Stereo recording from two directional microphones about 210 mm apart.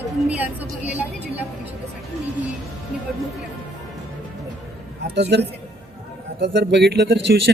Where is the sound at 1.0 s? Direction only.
5° right (ahead or behind).